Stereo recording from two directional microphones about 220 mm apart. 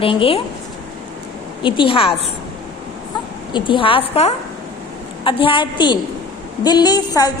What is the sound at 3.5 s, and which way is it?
A woman's voice, 20° left (ahead or behind).